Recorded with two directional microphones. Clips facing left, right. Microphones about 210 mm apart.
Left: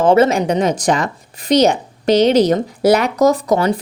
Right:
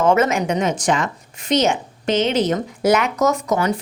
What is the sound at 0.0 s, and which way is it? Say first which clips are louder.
A woman's voice: left 4 dB; 30° left (ahead or behind).